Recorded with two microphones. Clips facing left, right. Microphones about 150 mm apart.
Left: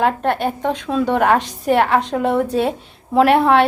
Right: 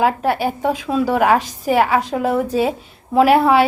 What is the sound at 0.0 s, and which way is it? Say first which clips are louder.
A woman's voice: right 1 dB; 5° right (ahead or behind).